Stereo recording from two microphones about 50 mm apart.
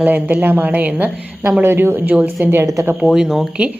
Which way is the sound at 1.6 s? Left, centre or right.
Right.